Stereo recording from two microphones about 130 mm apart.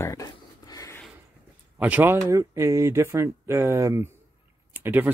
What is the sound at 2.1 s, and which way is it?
Speech, 25° right (ahead or behind).